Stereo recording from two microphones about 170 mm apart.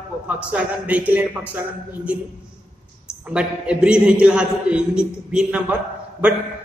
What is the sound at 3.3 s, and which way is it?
A man's voice, 5° right (ahead or behind).